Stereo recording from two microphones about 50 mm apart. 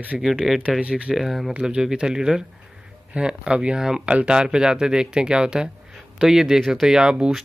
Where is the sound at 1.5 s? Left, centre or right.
Centre.